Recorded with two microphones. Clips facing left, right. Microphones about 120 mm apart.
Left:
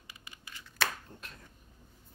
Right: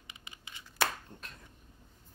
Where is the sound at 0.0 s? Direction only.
20° right (ahead or behind).